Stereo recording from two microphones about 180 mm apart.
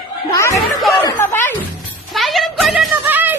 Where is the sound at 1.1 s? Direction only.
10° left (ahead or behind).